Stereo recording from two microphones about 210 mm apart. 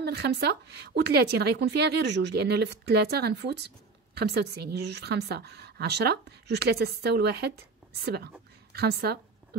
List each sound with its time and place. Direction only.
0.0 s a woman's voice: 50° right (ahead or behind)